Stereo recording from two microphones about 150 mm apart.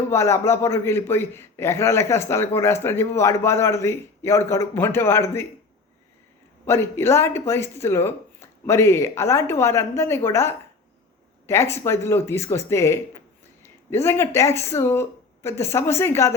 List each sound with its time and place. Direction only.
0.1 s a man's voice: 20° left (ahead or behind)
6.7 s a man's voice: 15° left (ahead or behind)